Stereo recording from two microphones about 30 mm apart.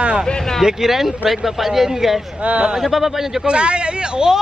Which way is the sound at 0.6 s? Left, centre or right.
Centre.